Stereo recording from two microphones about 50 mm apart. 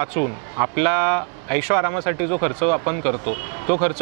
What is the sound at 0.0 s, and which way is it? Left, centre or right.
Speech, right.